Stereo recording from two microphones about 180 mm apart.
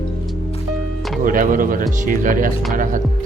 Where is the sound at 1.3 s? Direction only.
50° right (ahead or behind).